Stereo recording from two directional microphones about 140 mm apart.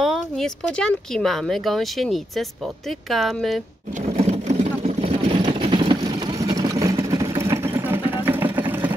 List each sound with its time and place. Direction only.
0.0 s speech: centre (ahead or behind)
4.2 s vehicle: 50° right (ahead or behind); by 8.9 s 15° right (ahead or behind)